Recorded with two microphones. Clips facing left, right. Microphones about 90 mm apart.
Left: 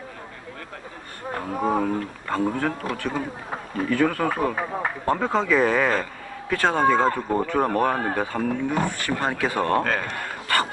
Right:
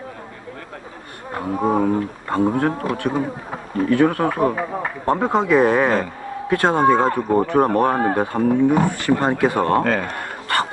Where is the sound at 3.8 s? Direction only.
35° right (ahead or behind).